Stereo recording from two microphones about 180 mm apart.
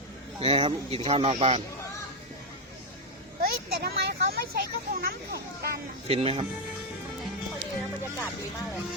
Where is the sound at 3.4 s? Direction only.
55° right (ahead or behind).